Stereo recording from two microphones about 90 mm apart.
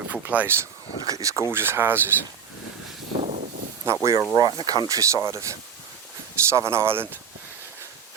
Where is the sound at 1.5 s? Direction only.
25° right (ahead or behind).